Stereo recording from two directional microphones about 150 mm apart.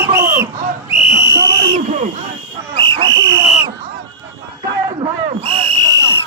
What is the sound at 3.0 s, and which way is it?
Whistle, 25° right (ahead or behind).